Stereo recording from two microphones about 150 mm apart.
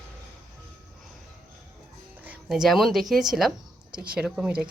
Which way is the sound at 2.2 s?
5° right (ahead or behind).